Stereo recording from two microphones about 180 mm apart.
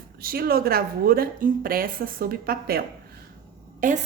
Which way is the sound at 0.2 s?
55° right (ahead or behind).